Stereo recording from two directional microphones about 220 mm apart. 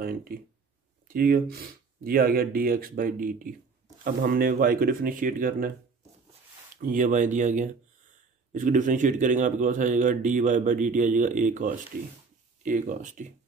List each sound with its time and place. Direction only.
1.0 s a man's voice: 40° right (ahead or behind)
6.8 s a man's voice: 40° right (ahead or behind)